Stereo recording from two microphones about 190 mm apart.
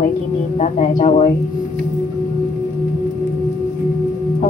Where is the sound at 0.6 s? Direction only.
40° left (ahead or behind).